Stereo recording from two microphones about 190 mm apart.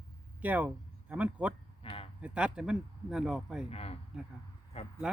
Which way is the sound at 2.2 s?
5° right (ahead or behind).